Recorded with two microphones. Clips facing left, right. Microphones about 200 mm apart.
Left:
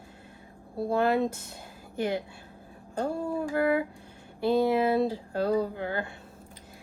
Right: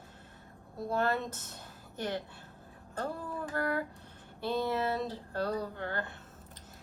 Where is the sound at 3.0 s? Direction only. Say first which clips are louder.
Left 7 dB; 25° left (ahead or behind).